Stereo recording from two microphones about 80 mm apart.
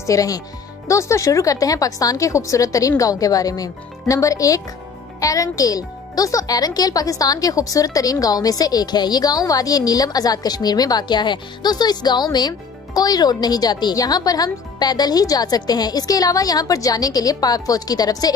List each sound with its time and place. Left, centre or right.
0.0 s speech: left